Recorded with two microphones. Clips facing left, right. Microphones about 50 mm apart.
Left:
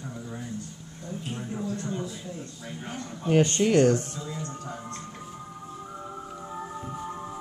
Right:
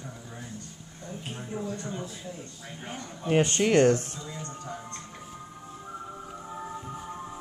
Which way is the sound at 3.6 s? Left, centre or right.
Right.